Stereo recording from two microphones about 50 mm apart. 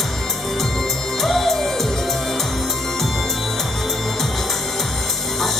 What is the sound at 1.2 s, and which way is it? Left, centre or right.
Music, centre.